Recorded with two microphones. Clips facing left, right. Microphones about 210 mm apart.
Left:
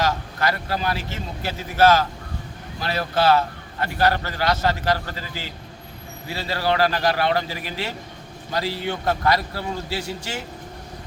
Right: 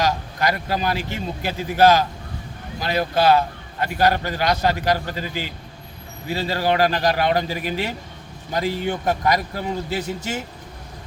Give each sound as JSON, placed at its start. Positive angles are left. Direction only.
{"t": 0.0, "sound": "a man's voice", "side_deg": -15}